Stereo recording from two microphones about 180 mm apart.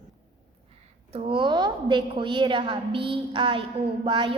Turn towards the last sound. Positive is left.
turn(degrees=-30)  # may be behind; listen again after turning